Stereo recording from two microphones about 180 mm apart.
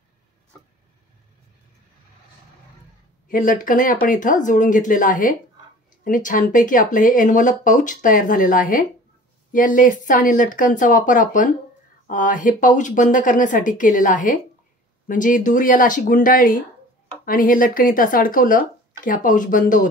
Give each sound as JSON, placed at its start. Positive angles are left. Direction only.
{"t": 3.3, "sound": "speech", "side_deg": 45}